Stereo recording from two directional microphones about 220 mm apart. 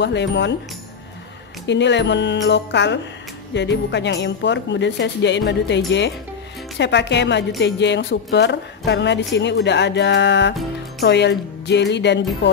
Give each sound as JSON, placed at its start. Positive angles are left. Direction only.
{"t": 0.0, "sound": "speech", "side_deg": 50}
{"t": 1.7, "sound": "speech", "side_deg": 55}